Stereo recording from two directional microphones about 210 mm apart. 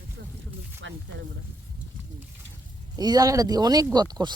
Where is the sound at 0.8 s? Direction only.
60° right (ahead or behind).